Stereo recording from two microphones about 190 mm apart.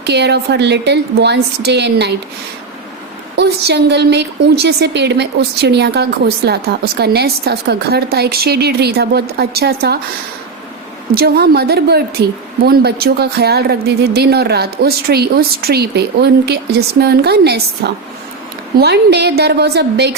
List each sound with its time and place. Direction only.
0.0 s speech: 65° right (ahead or behind)
3.3 s speech: 60° right (ahead or behind)
11.1 s speech: 55° right (ahead or behind)